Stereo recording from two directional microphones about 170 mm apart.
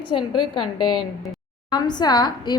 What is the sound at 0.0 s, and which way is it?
Speech, 30° left (ahead or behind).